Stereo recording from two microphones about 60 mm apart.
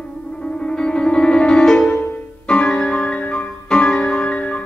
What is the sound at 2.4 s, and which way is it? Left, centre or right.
Music, centre.